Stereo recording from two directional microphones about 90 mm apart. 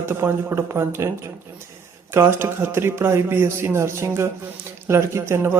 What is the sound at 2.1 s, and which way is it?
Speech, 30° right (ahead or behind).